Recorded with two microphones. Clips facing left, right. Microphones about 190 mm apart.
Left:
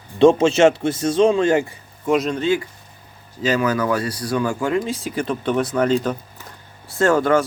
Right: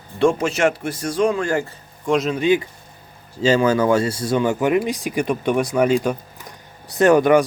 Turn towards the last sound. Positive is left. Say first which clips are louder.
# right 3 dB
turn(degrees=-15)  # may be behind; listen again after turning